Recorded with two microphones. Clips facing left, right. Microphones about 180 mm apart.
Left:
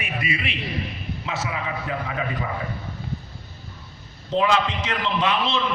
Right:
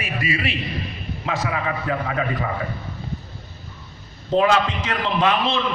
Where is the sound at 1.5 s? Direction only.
55° right (ahead or behind).